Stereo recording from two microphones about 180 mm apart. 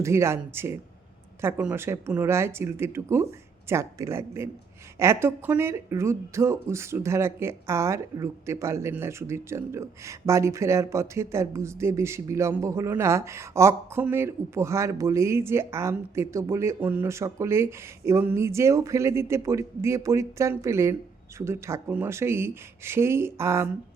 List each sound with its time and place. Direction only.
0.0 s speech: 15° right (ahead or behind)